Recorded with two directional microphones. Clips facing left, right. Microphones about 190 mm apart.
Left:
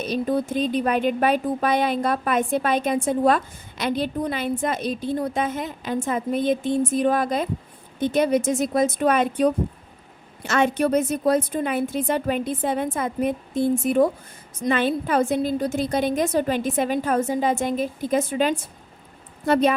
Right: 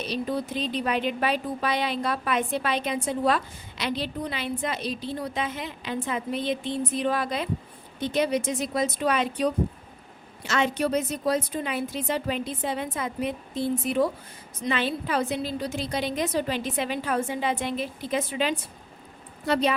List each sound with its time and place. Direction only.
0.0 s speech: 50° left (ahead or behind)